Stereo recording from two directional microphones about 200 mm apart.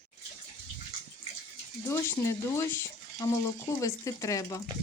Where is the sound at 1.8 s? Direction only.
15° left (ahead or behind).